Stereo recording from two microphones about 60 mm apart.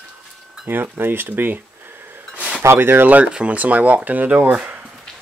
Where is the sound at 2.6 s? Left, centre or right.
Right.